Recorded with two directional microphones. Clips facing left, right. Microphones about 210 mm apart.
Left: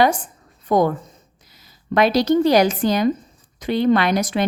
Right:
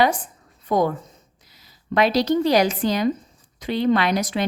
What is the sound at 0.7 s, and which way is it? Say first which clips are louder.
Speech: left 3 dB; 45° left (ahead or behind).